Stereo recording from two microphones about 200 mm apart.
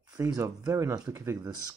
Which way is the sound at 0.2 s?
15° right (ahead or behind).